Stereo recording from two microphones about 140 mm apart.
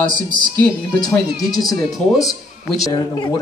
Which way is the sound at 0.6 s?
5° left (ahead or behind).